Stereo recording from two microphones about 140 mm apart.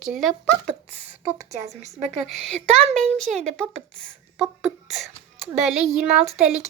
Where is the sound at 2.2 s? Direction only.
Centre (ahead or behind).